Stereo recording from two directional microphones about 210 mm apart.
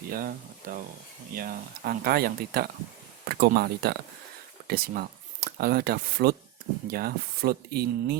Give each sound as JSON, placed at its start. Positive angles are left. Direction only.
{"t": 0.1, "sound": "speech", "side_deg": -45}